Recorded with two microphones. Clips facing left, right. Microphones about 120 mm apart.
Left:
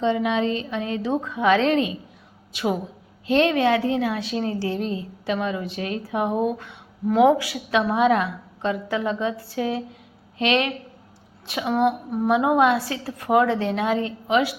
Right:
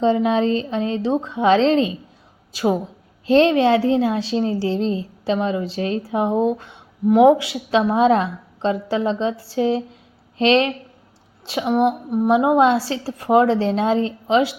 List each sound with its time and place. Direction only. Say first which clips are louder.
0.0 s a woman's voice: right 4 dB; 35° right (ahead or behind)